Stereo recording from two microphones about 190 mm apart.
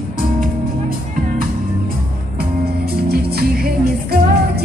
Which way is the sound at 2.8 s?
55° right (ahead or behind).